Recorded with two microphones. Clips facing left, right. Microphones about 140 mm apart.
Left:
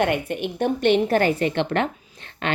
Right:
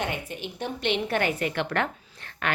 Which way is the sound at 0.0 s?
60° left (ahead or behind).